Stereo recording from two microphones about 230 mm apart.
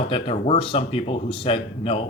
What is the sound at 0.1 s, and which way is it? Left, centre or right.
Speech, left.